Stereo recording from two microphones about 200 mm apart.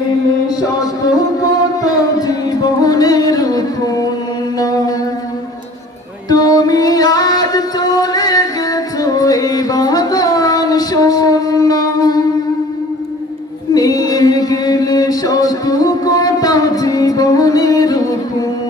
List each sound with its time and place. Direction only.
1.8 s music: 20° left (ahead or behind)
6.2 s music: 15° left (ahead or behind)
13.7 s a sound: 15° left (ahead or behind)